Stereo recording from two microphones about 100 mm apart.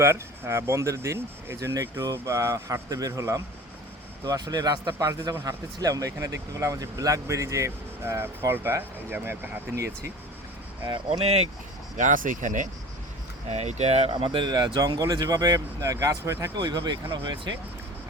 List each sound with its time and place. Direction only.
0.0 s speech: 25° right (ahead or behind)
10.8 s speech: 50° right (ahead or behind)
11.2 s speech: 90° right
13.5 s speech: 90° right
14.1 s speech: 55° right (ahead or behind); by 16.5 s 30° right (ahead or behind)
16.6 s speech: 45° right (ahead or behind)